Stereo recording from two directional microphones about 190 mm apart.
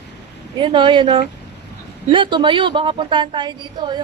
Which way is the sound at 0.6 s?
25° right (ahead or behind).